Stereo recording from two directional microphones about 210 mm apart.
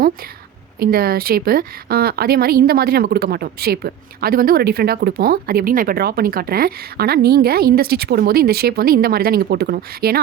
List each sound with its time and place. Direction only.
0.8 s speech: 45° right (ahead or behind)